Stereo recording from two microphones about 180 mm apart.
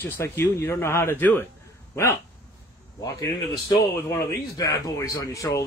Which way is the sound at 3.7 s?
20° left (ahead or behind).